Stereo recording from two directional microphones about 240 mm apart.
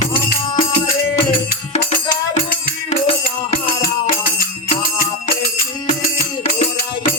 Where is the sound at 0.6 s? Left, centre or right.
Left.